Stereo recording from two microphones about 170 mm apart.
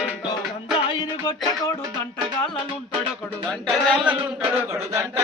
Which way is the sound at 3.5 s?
5° left (ahead or behind).